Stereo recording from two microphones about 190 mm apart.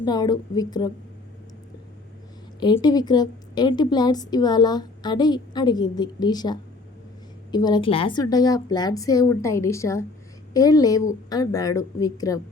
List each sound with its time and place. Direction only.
0.0 s a woman's voice: 20° left (ahead or behind)
2.6 s a woman's voice: 20° left (ahead or behind)